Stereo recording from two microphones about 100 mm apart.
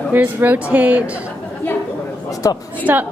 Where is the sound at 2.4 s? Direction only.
40° left (ahead or behind).